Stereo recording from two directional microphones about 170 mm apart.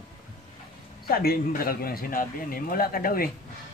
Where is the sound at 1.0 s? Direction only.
65° left (ahead or behind).